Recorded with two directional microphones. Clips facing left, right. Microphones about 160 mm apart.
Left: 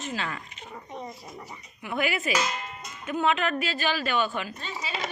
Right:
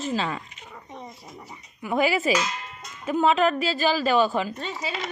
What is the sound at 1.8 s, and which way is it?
A woman's voice, 35° right (ahead or behind).